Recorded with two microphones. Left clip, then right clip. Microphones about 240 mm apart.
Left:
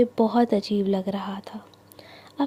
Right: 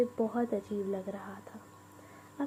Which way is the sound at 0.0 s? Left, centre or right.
Left.